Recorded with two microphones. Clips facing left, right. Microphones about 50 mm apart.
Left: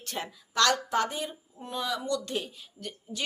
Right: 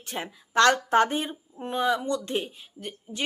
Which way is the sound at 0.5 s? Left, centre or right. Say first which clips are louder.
Right 6 dB; right.